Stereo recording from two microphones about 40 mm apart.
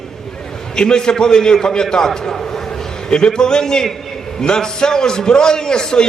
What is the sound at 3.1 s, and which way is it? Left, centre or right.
A man's voice, centre.